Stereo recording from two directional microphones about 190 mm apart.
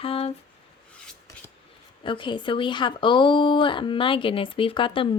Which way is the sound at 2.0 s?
25° left (ahead or behind).